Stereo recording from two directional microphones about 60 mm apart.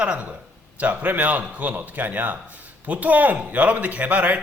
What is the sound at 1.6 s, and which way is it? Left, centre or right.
A man's voice, right.